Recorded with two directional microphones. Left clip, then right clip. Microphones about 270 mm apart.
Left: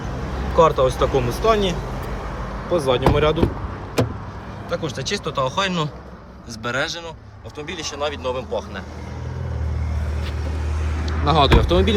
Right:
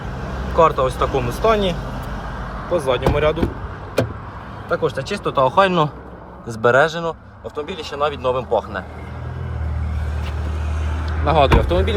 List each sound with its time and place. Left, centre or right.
0.5 s speech: centre
2.6 s speech: centre
4.7 s speech: centre
6.6 s speech: centre
11.3 s speech: centre